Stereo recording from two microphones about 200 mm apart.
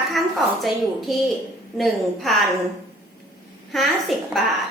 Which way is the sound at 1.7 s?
Centre (ahead or behind).